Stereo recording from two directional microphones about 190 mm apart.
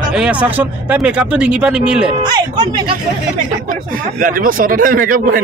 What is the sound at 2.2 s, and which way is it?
Speech, 20° right (ahead or behind).